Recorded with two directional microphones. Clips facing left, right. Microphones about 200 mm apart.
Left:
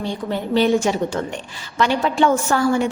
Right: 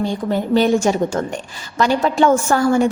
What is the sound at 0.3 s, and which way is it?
A woman's voice, 45° right (ahead or behind).